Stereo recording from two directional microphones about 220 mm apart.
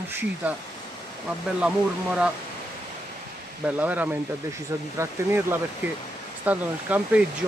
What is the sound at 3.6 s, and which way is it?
Speech, 5° right (ahead or behind).